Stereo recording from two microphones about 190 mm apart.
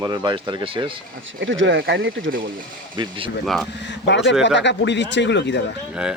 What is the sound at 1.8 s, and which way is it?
Speech, 65° right (ahead or behind).